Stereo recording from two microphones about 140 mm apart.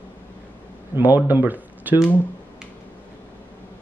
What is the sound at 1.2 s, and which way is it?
Speech, 15° right (ahead or behind).